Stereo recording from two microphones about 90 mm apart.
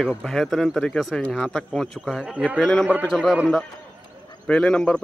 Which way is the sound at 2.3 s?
15° right (ahead or behind).